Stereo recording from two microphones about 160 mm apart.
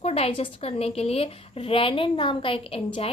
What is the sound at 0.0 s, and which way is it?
A woman's voice, 40° left (ahead or behind).